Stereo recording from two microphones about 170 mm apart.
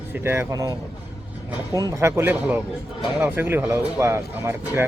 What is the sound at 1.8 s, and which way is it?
Speech, 20° right (ahead or behind).